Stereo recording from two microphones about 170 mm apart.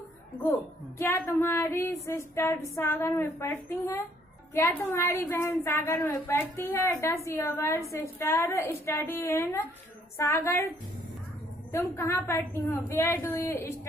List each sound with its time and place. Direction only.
0.4 s a woman's voice: 15° left (ahead or behind)
11.7 s a woman's voice: 15° left (ahead or behind)